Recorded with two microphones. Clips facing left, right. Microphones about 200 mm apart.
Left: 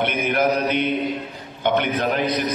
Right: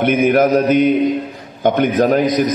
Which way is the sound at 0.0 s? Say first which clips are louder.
Right 8 dB; 50° right (ahead or behind).